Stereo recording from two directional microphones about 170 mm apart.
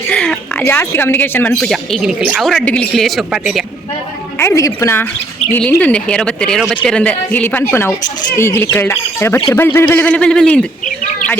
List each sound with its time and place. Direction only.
0.1 s speech: 5° left (ahead or behind)
4.4 s speech: 15° left (ahead or behind)